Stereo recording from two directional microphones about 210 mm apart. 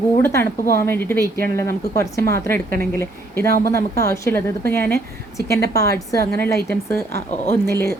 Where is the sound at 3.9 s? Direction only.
15° left (ahead or behind).